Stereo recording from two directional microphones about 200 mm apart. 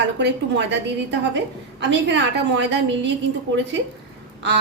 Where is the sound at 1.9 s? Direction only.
60° right (ahead or behind).